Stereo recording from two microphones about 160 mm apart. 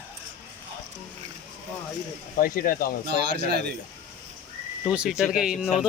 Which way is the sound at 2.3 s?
60° left (ahead or behind).